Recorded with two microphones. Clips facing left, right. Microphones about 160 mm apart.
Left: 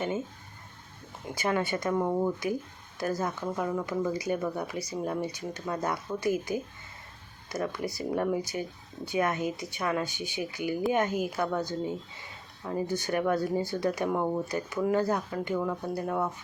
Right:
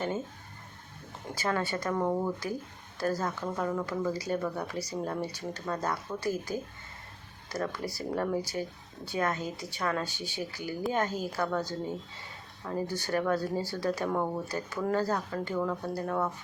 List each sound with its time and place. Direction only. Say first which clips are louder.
1.4 s speech: left 2 dB; 20° left (ahead or behind)
14.8 s speech: left 2 dB; 10° left (ahead or behind)